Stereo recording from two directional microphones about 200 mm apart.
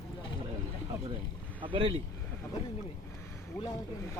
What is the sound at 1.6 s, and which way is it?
Speech, 25° right (ahead or behind).